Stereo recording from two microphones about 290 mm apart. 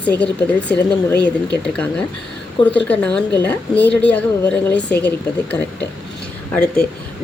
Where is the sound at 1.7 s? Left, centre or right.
Centre.